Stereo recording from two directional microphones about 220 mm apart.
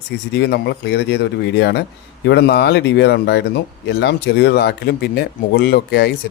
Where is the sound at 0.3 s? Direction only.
50° left (ahead or behind).